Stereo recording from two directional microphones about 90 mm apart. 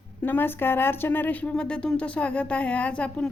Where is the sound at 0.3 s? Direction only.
25° left (ahead or behind).